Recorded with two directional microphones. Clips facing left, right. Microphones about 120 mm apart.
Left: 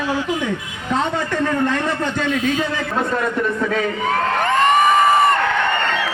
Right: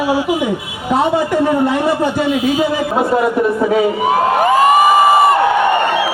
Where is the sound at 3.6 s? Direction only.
15° right (ahead or behind).